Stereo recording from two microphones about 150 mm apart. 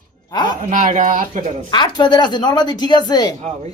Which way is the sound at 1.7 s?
30° left (ahead or behind).